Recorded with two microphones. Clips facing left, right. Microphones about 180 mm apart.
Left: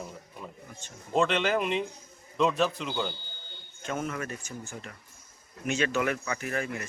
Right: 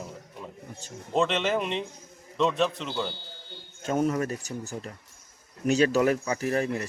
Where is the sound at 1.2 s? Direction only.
Centre (ahead or behind).